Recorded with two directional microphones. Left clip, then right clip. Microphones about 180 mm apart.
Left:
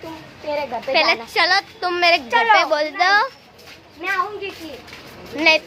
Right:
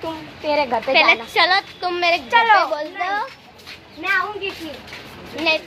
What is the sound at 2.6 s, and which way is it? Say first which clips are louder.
Speech: left 4 dB; 45° left (ahead or behind).